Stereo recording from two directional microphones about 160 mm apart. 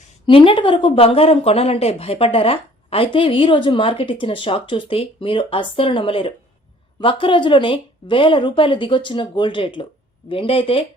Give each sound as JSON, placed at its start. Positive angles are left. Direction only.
{"t": 0.3, "sound": "speech", "side_deg": 35}